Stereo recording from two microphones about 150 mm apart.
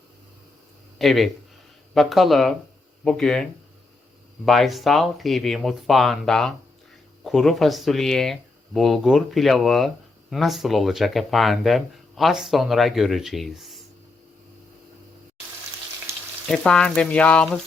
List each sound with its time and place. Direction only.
0.9 s speech: centre (ahead or behind)
16.5 s speech: 5° left (ahead or behind)